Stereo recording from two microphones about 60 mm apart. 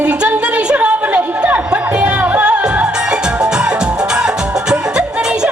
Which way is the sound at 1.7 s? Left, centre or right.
Right.